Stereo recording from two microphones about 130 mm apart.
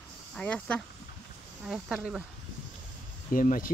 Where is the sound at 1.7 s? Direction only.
5° right (ahead or behind).